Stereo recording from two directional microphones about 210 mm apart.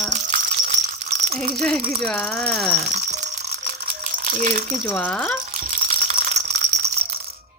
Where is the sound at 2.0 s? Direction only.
5° left (ahead or behind).